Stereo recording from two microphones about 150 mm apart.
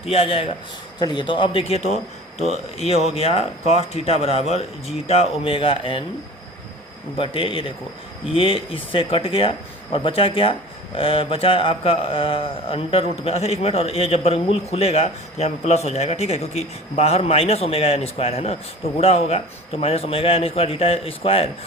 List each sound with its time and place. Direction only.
0.0 s speech: 40° left (ahead or behind)
7.2 s speech: 35° left (ahead or behind)